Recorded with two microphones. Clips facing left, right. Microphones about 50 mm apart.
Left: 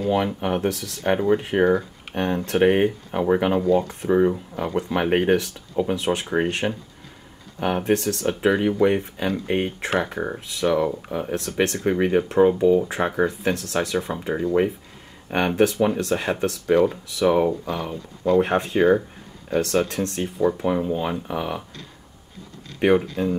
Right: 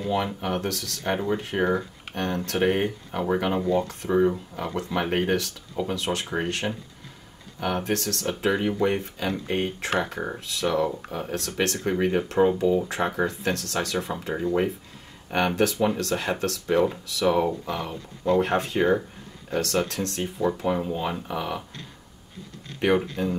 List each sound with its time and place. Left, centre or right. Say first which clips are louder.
0.1 s speech: left 3 dB; centre
18.3 s speech: left 3 dB; centre
19.5 s speech: left 4 dB; left
23.2 s speech: left 3 dB; centre